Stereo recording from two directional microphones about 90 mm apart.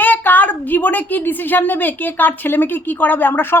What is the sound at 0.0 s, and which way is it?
A woman's voice, 20° left (ahead or behind).